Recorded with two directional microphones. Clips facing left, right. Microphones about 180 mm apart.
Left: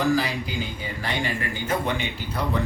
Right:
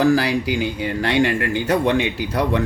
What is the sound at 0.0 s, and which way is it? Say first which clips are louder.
Speech: right 6 dB; 75° right (ahead or behind).